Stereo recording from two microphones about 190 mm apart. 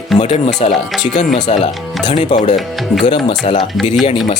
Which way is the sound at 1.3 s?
40° left (ahead or behind).